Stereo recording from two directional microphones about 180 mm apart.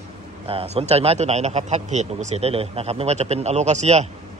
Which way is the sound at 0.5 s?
30° right (ahead or behind).